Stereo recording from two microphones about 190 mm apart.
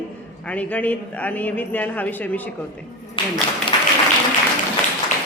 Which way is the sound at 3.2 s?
25° left (ahead or behind).